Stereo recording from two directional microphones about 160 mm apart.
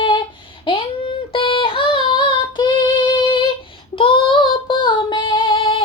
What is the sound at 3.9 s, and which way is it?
Child singing, 35° left (ahead or behind).